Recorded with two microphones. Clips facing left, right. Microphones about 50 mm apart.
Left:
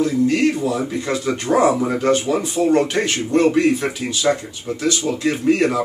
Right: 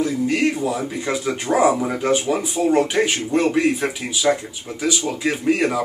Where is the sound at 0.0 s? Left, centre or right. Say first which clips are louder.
Left 3 dB; centre.